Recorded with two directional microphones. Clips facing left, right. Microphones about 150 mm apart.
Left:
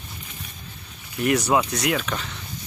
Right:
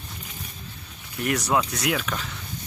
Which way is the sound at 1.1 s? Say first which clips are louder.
Left 3 dB; centre (ahead or behind).